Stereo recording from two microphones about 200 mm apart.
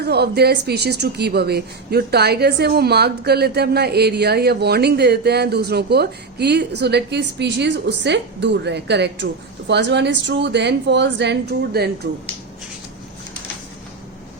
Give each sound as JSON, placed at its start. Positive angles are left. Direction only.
{"t": 0.0, "sound": "a woman's voice", "side_deg": -55}